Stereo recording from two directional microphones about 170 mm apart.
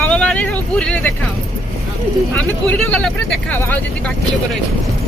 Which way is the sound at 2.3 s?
10° left (ahead or behind).